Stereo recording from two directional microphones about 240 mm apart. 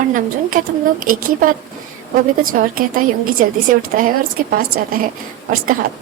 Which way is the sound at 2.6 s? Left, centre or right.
Right.